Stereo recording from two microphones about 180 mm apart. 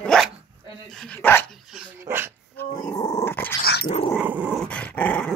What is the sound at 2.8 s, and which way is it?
Dog, 20° left (ahead or behind).